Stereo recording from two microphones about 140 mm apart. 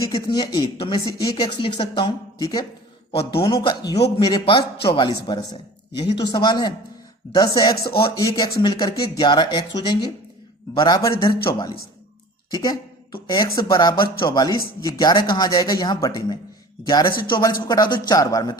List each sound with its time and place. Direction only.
0.3 s a man's voice: 30° left (ahead or behind)
3.2 s a man's voice: 40° left (ahead or behind)